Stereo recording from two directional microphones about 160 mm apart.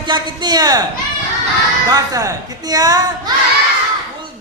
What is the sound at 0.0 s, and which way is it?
Speech, 25° right (ahead or behind).